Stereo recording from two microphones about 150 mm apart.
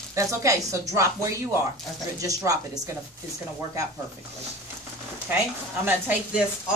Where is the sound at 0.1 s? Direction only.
20° right (ahead or behind).